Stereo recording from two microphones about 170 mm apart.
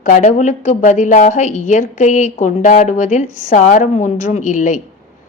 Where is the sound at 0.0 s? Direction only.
45° left (ahead or behind).